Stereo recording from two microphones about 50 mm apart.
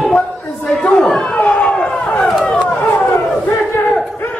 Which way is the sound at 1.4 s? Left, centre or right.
Left.